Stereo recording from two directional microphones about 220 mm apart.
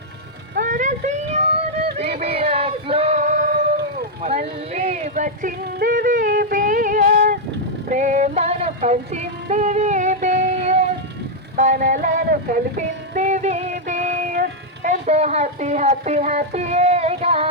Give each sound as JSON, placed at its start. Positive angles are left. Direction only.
{"t": 0.5, "sound": "vehicle", "side_deg": -35}
{"t": 2.0, "sound": "male singing", "side_deg": -30}
{"t": 4.2, "sound": "music", "side_deg": -30}
{"t": 11.5, "sound": "a sound", "side_deg": -35}